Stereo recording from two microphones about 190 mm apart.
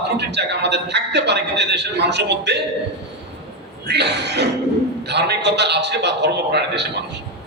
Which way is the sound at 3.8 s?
60° right (ahead or behind).